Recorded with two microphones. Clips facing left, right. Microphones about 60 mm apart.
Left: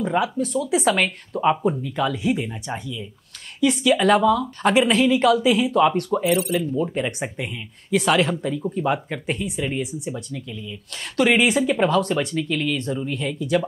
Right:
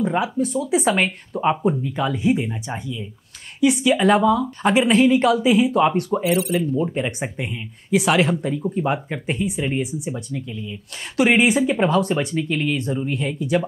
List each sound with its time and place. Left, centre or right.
0.1 s speech: centre
9.8 s speech: centre
10.3 s speech: centre
12.4 s speech: centre
12.7 s speech: centre